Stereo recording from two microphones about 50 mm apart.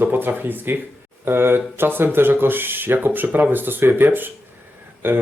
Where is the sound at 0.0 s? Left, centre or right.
Right.